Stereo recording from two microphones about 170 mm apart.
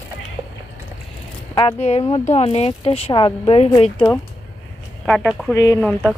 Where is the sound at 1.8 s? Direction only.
40° left (ahead or behind).